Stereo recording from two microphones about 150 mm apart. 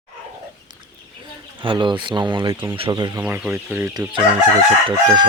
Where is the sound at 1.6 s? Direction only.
35° right (ahead or behind).